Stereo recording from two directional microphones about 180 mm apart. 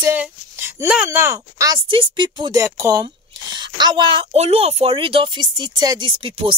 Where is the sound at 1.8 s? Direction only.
30° right (ahead or behind).